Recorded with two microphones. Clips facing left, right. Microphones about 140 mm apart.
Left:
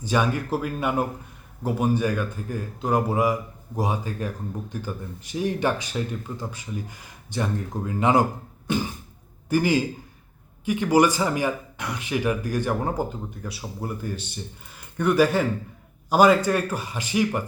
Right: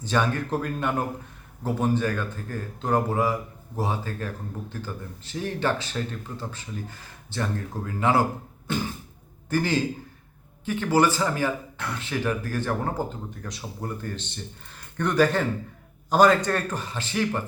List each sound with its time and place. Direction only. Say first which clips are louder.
0.0 s speech: left 1 dB; 10° left (ahead or behind)